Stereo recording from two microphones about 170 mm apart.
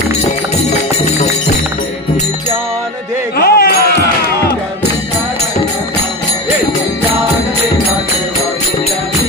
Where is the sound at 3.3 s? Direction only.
65° left (ahead or behind).